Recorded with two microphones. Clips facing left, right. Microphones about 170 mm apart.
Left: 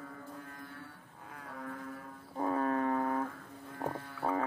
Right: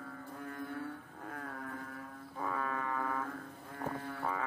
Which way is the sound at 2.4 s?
40° left (ahead or behind).